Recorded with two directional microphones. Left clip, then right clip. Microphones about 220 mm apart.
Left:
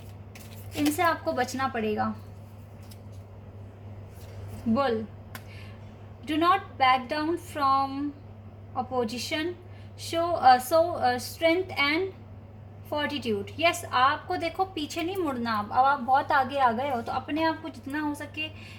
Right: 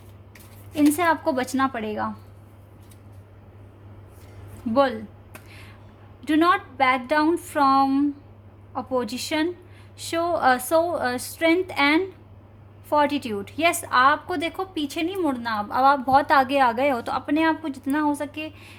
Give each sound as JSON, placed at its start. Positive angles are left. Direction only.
{"t": 0.7, "sound": "a woman's voice", "side_deg": -45}
{"t": 6.2, "sound": "a woman's voice", "side_deg": -45}